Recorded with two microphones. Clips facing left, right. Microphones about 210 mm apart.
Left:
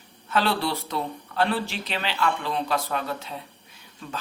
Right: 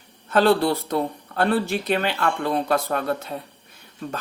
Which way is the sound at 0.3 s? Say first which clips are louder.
Right 7 dB; 50° right (ahead or behind).